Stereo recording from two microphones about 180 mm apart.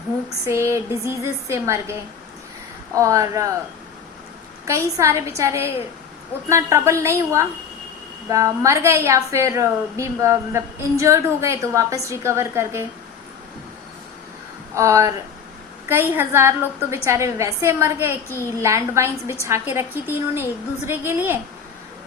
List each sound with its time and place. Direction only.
0.4 s a woman's voice: 15° right (ahead or behind)
4.6 s a woman's voice: 15° right (ahead or behind)
14.8 s a woman's voice: 15° right (ahead or behind)